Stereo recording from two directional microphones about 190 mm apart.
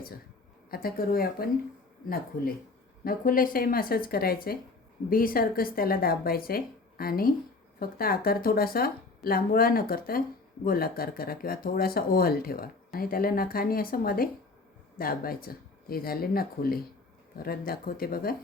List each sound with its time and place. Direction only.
0.7 s speech: 50° left (ahead or behind)
3.0 s speech: 50° left (ahead or behind)